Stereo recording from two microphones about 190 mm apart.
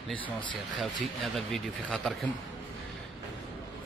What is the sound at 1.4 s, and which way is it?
Speech, centre (ahead or behind).